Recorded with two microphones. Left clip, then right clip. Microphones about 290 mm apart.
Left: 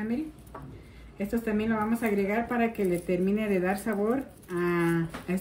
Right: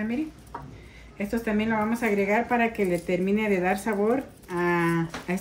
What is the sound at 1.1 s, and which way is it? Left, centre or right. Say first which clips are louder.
Speech: right 2 dB; centre.